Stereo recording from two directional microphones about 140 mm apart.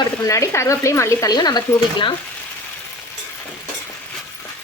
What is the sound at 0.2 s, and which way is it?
Speech, 20° left (ahead or behind).